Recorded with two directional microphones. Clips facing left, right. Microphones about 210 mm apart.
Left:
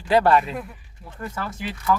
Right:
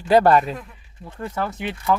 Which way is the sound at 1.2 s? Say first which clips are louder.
Right 4 dB; 25° right (ahead or behind).